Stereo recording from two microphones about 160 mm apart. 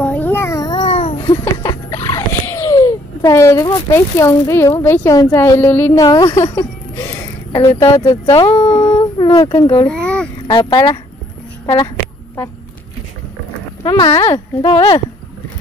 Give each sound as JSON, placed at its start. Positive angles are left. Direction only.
{"t": 0.0, "sound": "cat", "side_deg": 10}
{"t": 1.1, "sound": "a sound", "side_deg": 20}
{"t": 7.9, "sound": "speech", "side_deg": 30}
{"t": 9.2, "sound": "a sound", "side_deg": 25}
{"t": 9.5, "sound": "speech", "side_deg": 35}
{"t": 9.8, "sound": "babbling", "side_deg": 5}
{"t": 10.4, "sound": "speech", "side_deg": 30}
{"t": 13.8, "sound": "speech", "side_deg": 25}
{"t": 14.7, "sound": "speech", "side_deg": 30}